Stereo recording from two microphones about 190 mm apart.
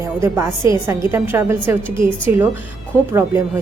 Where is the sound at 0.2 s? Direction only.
15° right (ahead or behind).